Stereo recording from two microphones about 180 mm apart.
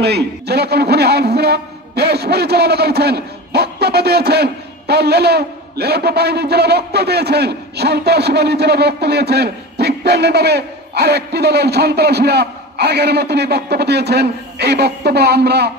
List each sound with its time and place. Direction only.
0.0 s a man's voice: 65° right (ahead or behind)